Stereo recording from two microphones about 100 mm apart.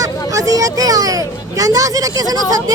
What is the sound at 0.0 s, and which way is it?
Hubbub, 35° right (ahead or behind).